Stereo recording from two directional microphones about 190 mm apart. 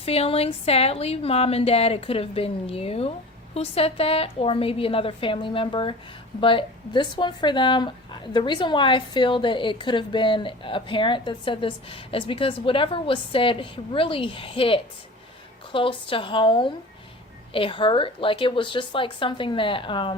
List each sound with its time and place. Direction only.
0.0 s a woman's voice: 30° left (ahead or behind)